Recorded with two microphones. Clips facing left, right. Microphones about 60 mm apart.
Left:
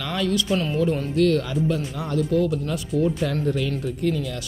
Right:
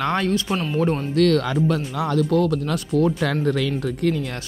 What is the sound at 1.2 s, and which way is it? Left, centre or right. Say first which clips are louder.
Speech: right 3 dB; right.